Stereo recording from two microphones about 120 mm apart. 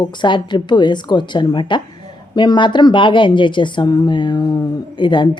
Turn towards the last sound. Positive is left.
turn(degrees=40)  # may be behind; listen again after turning